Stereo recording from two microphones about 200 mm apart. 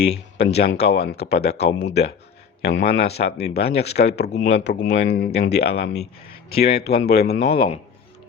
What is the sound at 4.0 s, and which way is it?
Speech, 55° left (ahead or behind).